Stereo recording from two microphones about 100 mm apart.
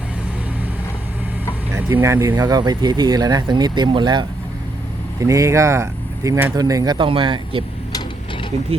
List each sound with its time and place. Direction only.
1.7 s speech: 25° right (ahead or behind)
2.5 s speech: 45° right (ahead or behind)
5.2 s speech: 35° right (ahead or behind)
6.9 s speech: 60° right (ahead or behind)